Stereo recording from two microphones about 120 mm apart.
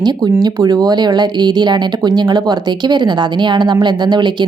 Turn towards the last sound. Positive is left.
turn(degrees=-40)  # may be behind; listen again after turning